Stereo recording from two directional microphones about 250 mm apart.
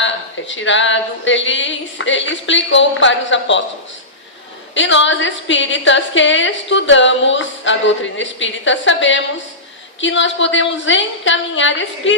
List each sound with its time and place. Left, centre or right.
0.0 s a woman's voice: left
4.7 s a woman's voice: left